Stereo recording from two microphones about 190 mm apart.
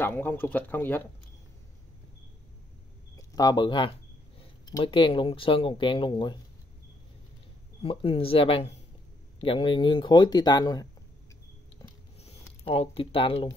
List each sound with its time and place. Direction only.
0.0 s speech: 10° left (ahead or behind)
3.2 s speech: 20° left (ahead or behind)
7.8 s speech: 30° left (ahead or behind)
12.6 s speech: 30° left (ahead or behind)